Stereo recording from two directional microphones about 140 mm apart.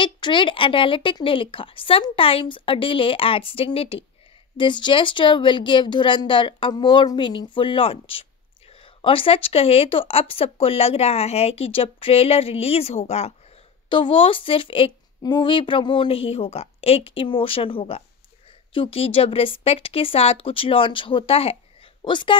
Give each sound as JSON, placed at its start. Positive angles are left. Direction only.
{"t": 0.0, "sound": "speech", "side_deg": 35}
{"t": 13.8, "sound": "speech", "side_deg": 40}